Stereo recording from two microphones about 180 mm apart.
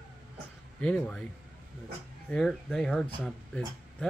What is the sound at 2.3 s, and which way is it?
Speech, 5° left (ahead or behind).